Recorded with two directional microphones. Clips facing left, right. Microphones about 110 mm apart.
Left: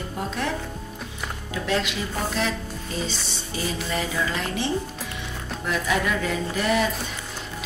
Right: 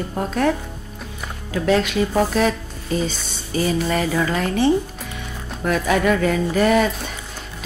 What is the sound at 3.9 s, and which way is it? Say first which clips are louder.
A woman's voice: right 6 dB; 50° right (ahead or behind).